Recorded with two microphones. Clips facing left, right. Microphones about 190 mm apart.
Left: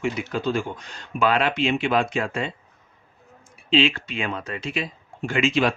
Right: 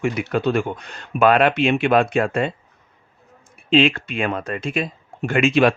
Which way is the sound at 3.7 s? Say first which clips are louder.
Right 4 dB; 55° right (ahead or behind).